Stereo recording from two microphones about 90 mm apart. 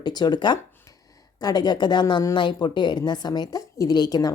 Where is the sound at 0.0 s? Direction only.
50° left (ahead or behind).